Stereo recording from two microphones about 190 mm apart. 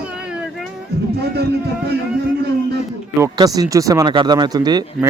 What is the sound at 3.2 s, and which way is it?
Speech, 20° right (ahead or behind).